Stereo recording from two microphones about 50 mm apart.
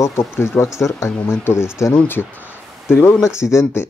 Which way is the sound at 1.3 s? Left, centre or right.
Left.